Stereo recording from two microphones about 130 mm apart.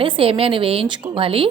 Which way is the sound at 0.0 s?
45° right (ahead or behind).